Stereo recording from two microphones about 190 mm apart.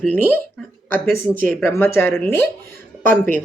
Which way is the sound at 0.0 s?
10° left (ahead or behind).